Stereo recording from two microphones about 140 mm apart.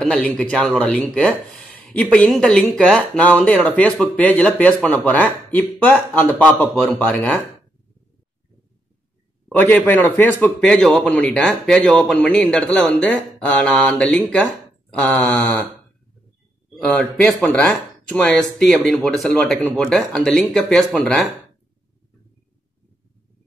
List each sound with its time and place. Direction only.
0.0 s a man's voice: 5° left (ahead or behind)
9.7 s a man's voice: 10° left (ahead or behind)
16.7 s a man's voice: 5° left (ahead or behind)